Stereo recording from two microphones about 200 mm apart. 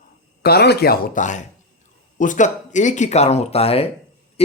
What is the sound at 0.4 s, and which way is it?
Speech, 55° left (ahead or behind).